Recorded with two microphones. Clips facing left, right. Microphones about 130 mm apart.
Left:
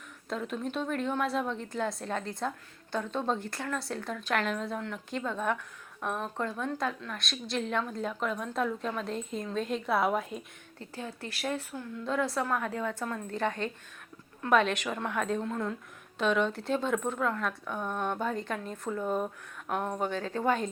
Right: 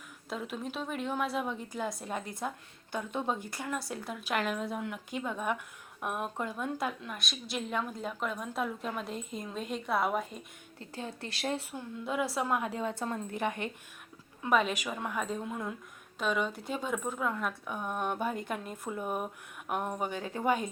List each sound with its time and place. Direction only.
0.3 s a woman's voice: 5° right (ahead or behind)
10.8 s a woman's voice: 20° right (ahead or behind)
13.3 s speech: 15° right (ahead or behind)
14.4 s a woman's voice: 5° right (ahead or behind)